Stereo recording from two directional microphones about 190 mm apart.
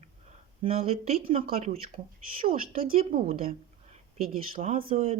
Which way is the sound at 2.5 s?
50° right (ahead or behind).